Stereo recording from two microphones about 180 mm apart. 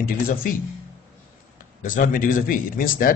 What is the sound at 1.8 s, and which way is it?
A man's voice, 45° left (ahead or behind).